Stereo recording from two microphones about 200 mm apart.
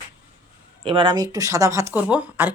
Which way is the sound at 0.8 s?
25° right (ahead or behind).